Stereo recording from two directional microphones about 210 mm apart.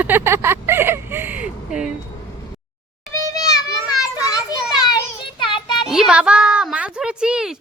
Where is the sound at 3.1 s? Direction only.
15° left (ahead or behind).